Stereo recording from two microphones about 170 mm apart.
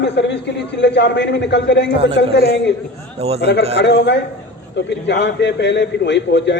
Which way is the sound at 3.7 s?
85° left.